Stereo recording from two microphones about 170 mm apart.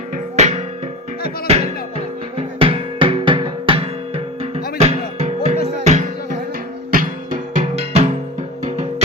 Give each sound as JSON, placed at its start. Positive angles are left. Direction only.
{"t": 0.3, "sound": "music", "side_deg": -40}